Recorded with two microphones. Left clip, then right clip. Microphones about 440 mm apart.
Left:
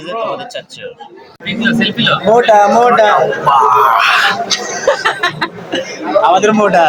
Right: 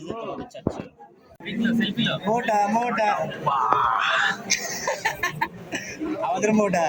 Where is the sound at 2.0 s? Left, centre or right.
Right.